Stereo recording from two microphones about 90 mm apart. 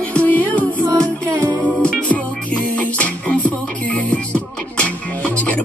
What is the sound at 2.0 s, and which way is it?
Music, 15° left (ahead or behind).